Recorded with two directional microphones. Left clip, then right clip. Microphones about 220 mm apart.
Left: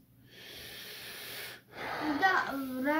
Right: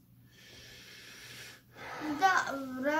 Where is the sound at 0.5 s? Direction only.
50° left (ahead or behind).